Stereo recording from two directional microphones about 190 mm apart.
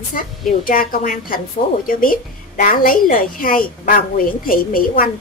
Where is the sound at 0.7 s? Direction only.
45° left (ahead or behind).